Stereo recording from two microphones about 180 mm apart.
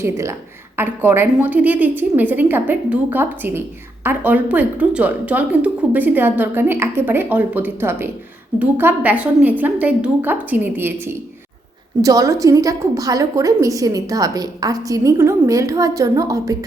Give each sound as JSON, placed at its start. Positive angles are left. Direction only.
{"t": 0.0, "sound": "a woman's voice", "side_deg": -15}